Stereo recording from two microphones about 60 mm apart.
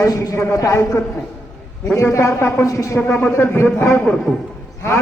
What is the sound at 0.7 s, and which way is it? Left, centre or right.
A man's voice, left.